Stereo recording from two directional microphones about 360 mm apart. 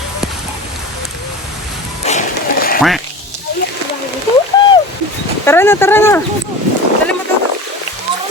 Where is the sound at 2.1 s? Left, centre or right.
Left.